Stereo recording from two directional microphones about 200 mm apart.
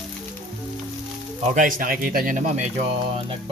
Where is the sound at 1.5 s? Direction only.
45° right (ahead or behind).